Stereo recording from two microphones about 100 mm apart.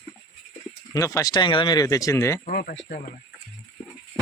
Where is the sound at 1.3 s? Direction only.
55° left (ahead or behind); by 2.4 s 30° left (ahead or behind).